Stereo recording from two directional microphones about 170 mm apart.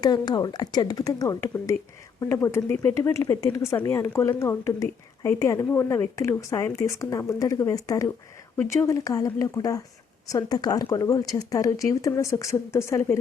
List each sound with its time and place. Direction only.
0.0 s speech: 25° left (ahead or behind)